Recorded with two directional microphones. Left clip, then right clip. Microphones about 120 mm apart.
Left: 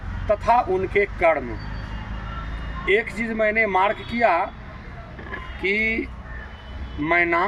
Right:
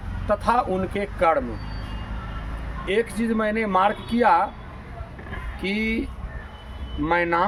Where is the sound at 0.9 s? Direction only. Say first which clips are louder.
Left 2 dB; 40° right (ahead or behind).